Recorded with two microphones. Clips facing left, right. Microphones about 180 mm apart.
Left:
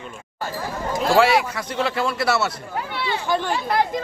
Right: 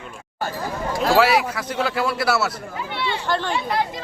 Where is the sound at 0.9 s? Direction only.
Centre (ahead or behind).